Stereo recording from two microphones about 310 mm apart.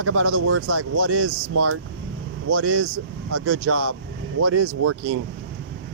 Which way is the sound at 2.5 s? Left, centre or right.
Right.